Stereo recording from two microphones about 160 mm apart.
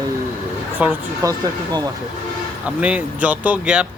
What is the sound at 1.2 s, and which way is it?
Speech, 25° right (ahead or behind).